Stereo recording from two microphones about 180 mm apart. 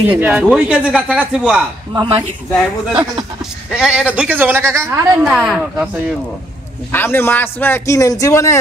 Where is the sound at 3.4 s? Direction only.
5° right (ahead or behind).